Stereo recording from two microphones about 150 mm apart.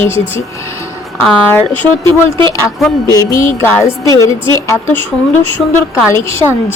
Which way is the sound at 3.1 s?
20° left (ahead or behind).